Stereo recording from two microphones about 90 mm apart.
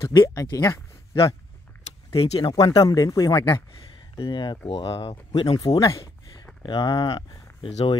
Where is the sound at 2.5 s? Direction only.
40° left (ahead or behind).